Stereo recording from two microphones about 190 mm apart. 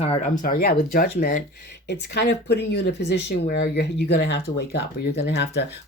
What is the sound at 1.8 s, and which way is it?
Speech, 60° left (ahead or behind).